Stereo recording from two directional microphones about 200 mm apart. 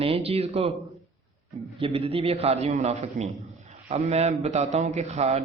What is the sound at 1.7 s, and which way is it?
A man's voice, 30° right (ahead or behind).